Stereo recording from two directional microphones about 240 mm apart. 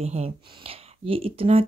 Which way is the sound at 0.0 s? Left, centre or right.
Right.